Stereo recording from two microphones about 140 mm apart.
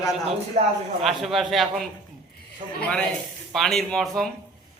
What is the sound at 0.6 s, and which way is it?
Speech, 50° right (ahead or behind).